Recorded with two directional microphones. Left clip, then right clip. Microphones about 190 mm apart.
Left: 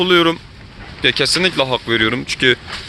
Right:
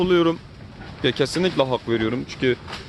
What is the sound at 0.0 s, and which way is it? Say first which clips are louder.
Speech: left 6 dB; centre (ahead or behind).